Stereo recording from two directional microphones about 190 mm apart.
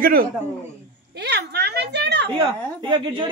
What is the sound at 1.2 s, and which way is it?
A woman's voice, 60° right (ahead or behind).